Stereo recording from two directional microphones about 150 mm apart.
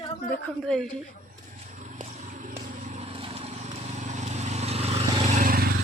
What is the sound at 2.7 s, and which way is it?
Vehicle, 55° right (ahead or behind).